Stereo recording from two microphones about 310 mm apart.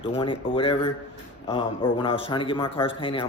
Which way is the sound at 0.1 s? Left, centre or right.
Centre.